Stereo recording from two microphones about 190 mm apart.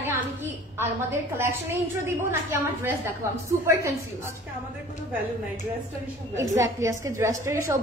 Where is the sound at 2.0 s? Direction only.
10° right (ahead or behind).